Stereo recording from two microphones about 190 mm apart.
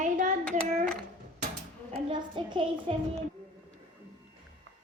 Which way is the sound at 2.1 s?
25° right (ahead or behind).